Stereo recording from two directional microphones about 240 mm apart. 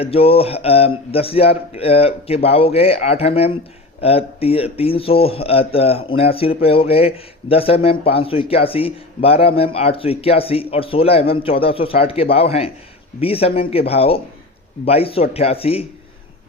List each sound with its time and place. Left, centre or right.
0.0 s speech: left